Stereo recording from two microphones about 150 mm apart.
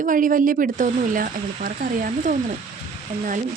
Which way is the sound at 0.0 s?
65° right (ahead or behind).